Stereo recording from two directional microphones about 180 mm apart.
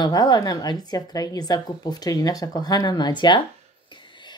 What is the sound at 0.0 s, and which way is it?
Speech, 20° left (ahead or behind).